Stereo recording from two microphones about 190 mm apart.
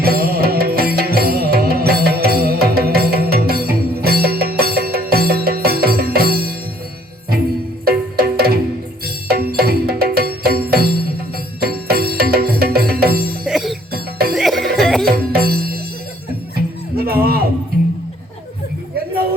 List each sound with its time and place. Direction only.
0.0 s music: 55° right (ahead or behind)
7.9 s music: 55° right (ahead or behind)
13.4 s music: centre (ahead or behind)
13.9 s music: 55° right (ahead or behind)
14.3 s music: centre (ahead or behind)
15.1 s music: 50° right (ahead or behind)
17.1 s a sound: 55° right (ahead or behind)